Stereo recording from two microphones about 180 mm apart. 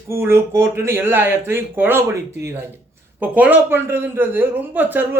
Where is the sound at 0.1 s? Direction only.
15° right (ahead or behind).